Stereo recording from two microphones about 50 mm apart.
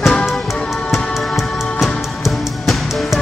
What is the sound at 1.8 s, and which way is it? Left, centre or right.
Music, centre.